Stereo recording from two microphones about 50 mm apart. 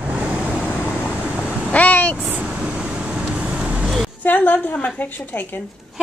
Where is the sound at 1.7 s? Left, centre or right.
Left.